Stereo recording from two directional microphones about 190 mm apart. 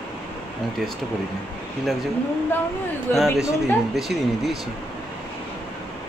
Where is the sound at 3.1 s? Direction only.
Centre (ahead or behind).